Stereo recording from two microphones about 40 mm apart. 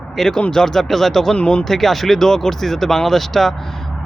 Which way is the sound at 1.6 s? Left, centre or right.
Centre.